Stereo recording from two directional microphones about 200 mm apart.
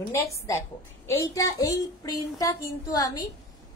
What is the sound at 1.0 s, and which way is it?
A child's voice, 15° left (ahead or behind).